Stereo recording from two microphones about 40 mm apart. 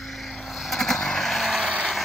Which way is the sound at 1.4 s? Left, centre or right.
Centre.